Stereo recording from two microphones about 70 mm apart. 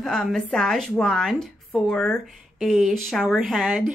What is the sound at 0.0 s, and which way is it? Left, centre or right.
A woman's voice, centre.